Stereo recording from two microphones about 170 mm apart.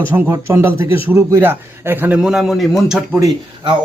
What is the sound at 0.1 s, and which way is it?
A man's voice, 15° right (ahead or behind).